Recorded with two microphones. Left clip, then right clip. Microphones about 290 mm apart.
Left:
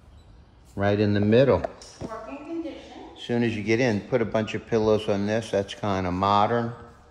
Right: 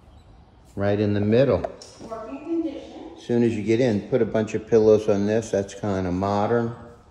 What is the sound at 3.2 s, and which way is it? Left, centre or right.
A man's voice, centre.